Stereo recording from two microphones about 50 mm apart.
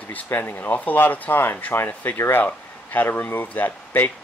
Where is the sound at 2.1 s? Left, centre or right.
Left.